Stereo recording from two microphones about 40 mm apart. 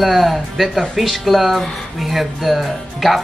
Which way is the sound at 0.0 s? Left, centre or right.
Centre.